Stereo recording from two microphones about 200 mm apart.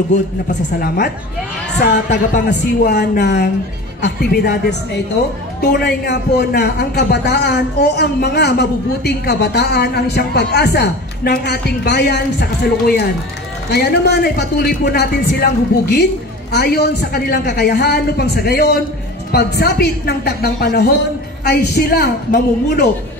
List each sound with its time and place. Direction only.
0.7 s a woman's voice: 45° left (ahead or behind)
16.5 s a woman's voice: 55° left (ahead or behind)